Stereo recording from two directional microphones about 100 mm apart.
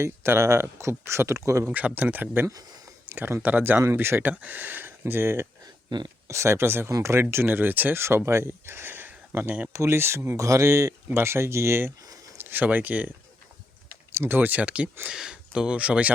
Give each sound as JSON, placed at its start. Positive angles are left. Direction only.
{"t": 0.0, "sound": "speech", "side_deg": -25}
{"t": 1.6, "sound": "speech", "side_deg": -15}
{"t": 14.1, "sound": "speech", "side_deg": -25}